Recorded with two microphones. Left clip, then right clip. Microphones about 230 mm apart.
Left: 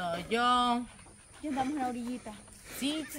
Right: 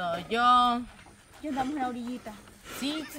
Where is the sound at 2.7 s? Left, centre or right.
Right.